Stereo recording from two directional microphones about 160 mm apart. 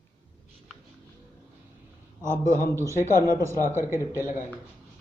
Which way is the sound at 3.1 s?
60° left (ahead or behind).